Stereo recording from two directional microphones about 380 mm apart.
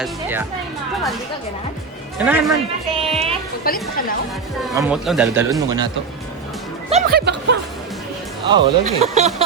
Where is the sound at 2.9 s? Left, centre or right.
Centre.